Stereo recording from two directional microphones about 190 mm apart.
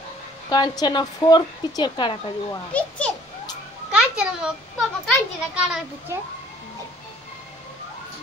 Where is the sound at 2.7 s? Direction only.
5° left (ahead or behind).